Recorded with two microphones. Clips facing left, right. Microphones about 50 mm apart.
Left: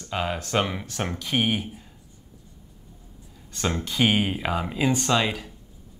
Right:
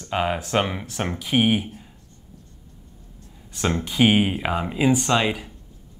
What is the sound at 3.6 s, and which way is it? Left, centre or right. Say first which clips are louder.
Speech: right 4 dB; centre.